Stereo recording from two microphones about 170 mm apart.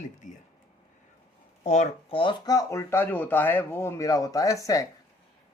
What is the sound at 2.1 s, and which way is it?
Speech, 25° left (ahead or behind).